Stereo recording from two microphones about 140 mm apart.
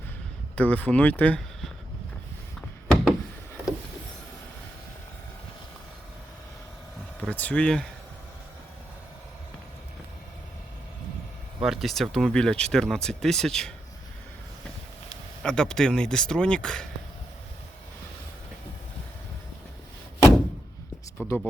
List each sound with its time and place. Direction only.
0.5 s speech: 10° left (ahead or behind)
2.6 s a sound: 5° left (ahead or behind)
7.2 s speech: 10° left (ahead or behind)
11.6 s speech: centre (ahead or behind)
15.4 s speech: 5° left (ahead or behind)
21.2 s speech: 15° left (ahead or behind)